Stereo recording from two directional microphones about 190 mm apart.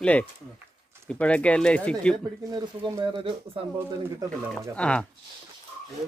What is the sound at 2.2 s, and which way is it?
Speech, 20° right (ahead or behind).